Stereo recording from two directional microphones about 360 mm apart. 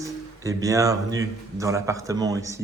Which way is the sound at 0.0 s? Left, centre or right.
Centre.